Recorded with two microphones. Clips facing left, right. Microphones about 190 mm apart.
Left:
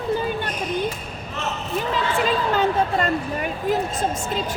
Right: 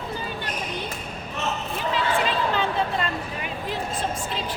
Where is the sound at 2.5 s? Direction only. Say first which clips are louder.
Left 5 dB; 45° left (ahead or behind).